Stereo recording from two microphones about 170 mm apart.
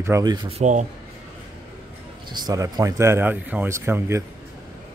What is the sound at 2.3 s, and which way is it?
Speech, 20° right (ahead or behind).